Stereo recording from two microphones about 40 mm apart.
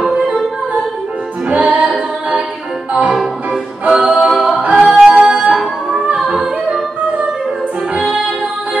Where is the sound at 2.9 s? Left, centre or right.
Right.